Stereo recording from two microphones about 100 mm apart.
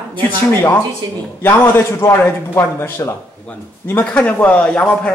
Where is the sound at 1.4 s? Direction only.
20° left (ahead or behind).